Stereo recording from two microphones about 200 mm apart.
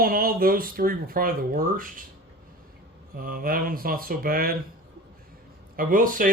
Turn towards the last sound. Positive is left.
turn(degrees=-45)  # may be behind; listen again after turning